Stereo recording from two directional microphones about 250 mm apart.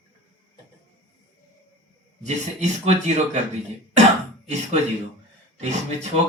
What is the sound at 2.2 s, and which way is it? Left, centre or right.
Speech, right.